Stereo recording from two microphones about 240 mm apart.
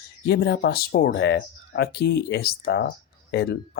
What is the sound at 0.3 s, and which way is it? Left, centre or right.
Speech, left.